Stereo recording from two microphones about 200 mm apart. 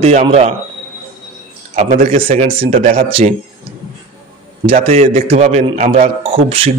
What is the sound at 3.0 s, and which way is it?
Speech, 25° right (ahead or behind).